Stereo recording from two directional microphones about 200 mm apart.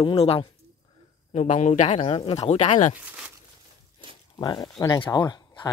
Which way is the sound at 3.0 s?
5° right (ahead or behind).